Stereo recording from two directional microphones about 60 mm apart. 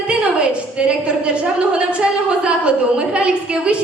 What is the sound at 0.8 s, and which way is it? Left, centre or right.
A woman's voice, centre.